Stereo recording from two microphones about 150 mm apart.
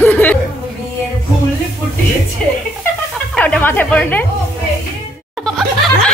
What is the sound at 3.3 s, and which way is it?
Speech, 10° left (ahead or behind).